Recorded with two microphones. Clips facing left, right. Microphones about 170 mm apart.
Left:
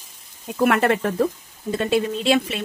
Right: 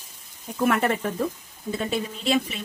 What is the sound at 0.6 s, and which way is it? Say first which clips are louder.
Speech: left 4 dB; 70° left (ahead or behind).